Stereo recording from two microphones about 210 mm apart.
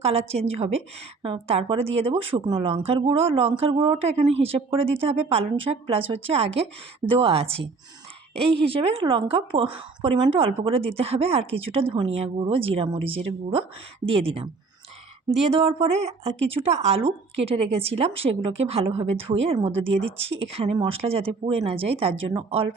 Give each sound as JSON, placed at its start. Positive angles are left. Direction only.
{"t": 0.0, "sound": "speech", "side_deg": -30}
{"t": 15.4, "sound": "speech", "side_deg": -25}